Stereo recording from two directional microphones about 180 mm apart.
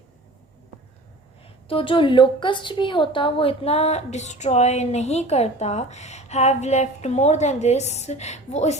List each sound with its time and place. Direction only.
1.6 s a woman's voice: 30° left (ahead or behind)